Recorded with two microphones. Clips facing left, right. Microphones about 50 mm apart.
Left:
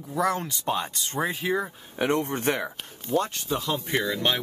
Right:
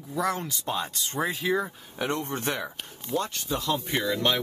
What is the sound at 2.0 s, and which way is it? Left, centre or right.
Speech, left.